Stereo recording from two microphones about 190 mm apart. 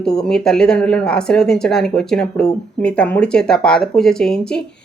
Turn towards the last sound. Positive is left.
turn(degrees=5)  # may be behind; listen again after turning